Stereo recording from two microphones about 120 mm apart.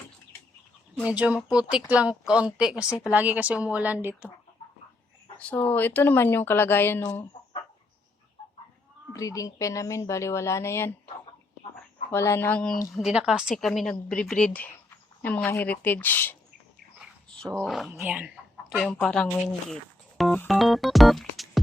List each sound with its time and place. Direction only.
1.0 s speech: 10° right (ahead or behind)
5.4 s speech: 15° left (ahead or behind)
9.1 s a woman's voice: 30° left (ahead or behind)
12.1 s a woman's voice: 20° left (ahead or behind)
12.9 s a woman's voice: 5° right (ahead or behind); by 16.3 s 15° left (ahead or behind)
17.7 s a woman's voice: centre (ahead or behind)
18.0 s speech: 15° right (ahead or behind)
18.7 s speech: 5° left (ahead or behind)
20.5 s keyboard: centre (ahead or behind)